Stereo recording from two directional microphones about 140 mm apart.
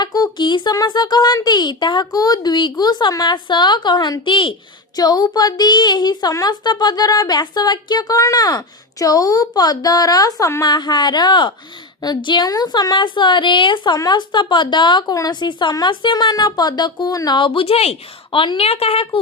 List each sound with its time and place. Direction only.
0.0 s a woman's voice: 30° left (ahead or behind)